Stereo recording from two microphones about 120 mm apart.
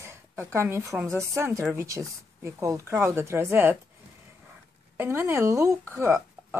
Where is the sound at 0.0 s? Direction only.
20° right (ahead or behind).